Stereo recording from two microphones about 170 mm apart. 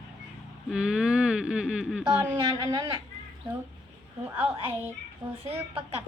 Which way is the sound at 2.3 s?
30° right (ahead or behind).